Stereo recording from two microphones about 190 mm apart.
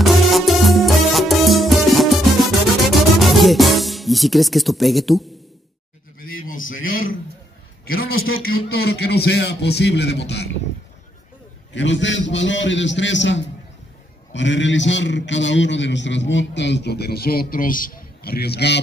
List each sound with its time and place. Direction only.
0.0 s music: centre (ahead or behind)
6.1 s a sound: 50° left (ahead or behind)
6.7 s a man's voice: 50° left (ahead or behind); by 10.6 s 65° left (ahead or behind)
11.7 s a man's voice: 75° left (ahead or behind)